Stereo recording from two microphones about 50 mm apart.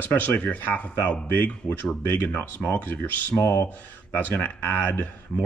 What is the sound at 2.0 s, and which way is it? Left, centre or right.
Speech, left.